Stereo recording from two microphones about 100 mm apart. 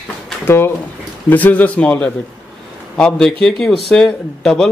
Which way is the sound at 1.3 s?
15° left (ahead or behind).